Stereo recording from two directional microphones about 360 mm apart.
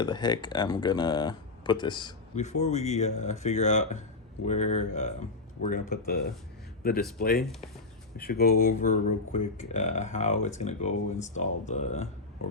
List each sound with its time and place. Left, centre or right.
0.0 s speech: centre